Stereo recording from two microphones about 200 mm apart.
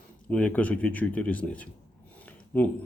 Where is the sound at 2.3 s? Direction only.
10° left (ahead or behind).